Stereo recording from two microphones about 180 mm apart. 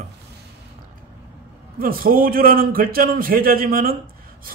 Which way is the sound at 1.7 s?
55° right (ahead or behind).